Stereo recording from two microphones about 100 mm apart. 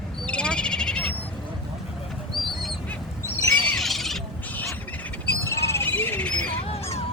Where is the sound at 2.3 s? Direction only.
Centre (ahead or behind).